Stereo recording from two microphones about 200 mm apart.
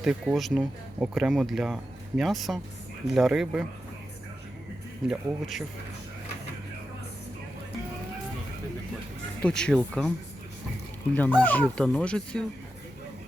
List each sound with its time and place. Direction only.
0.0 s speech: 5° right (ahead or behind)
5.0 s speech: centre (ahead or behind)
9.4 s speech: 5° left (ahead or behind)
11.1 s speech: 10° left (ahead or behind)